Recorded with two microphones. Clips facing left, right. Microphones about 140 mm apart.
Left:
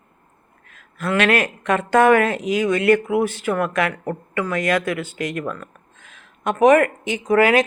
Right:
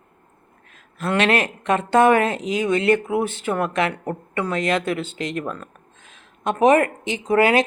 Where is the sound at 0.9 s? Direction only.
25° right (ahead or behind).